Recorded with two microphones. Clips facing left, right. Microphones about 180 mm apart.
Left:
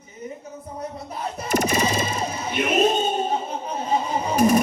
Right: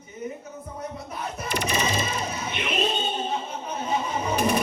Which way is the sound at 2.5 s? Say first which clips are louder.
Left 8 dB; 45° left (ahead or behind).